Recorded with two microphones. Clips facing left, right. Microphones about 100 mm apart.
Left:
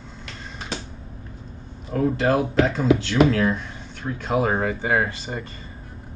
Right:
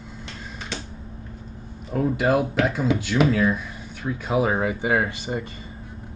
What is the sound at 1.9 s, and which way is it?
Speech, 5° right (ahead or behind).